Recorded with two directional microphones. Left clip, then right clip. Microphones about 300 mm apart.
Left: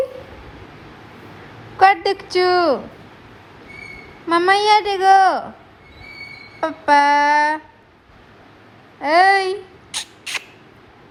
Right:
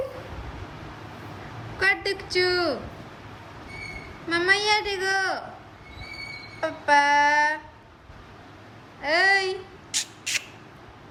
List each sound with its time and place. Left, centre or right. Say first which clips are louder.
1.8 s a woman's voice: left 10 dB; centre
4.4 s speech: left 8 dB; centre
6.7 s child singing: left 6 dB; centre
9.1 s a sound: left 7 dB; centre